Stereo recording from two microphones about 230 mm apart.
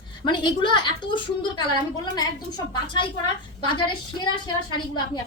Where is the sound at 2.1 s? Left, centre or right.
Centre.